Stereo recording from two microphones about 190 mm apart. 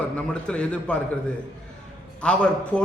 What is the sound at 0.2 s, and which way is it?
Speech, 5° left (ahead or behind).